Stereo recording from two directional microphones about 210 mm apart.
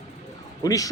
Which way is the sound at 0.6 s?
15° left (ahead or behind).